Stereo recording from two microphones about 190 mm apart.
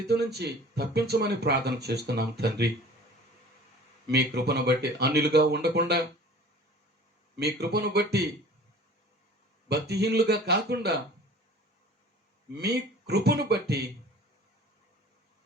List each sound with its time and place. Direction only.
0.1 s speech: 60° right (ahead or behind)
4.0 s speech: 60° right (ahead or behind)
7.3 s speech: 60° right (ahead or behind)
9.6 s speech: 60° right (ahead or behind)
12.5 s speech: 60° right (ahead or behind)